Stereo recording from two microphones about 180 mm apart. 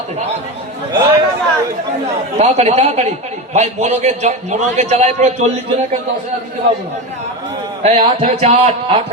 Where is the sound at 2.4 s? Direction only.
35° right (ahead or behind).